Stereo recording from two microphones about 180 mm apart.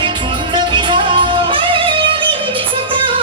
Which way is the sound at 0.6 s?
25° right (ahead or behind).